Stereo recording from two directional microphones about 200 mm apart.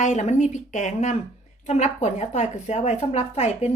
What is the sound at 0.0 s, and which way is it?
Speech, 35° left (ahead or behind).